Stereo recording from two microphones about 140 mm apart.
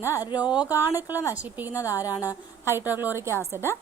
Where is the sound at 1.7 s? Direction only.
25° left (ahead or behind).